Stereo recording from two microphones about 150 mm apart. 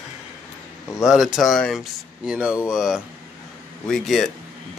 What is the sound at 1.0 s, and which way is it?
Speech, 5° right (ahead or behind).